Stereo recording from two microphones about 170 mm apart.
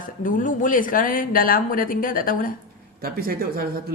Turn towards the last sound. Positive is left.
turn(degrees=-60)  # may be behind; listen again after turning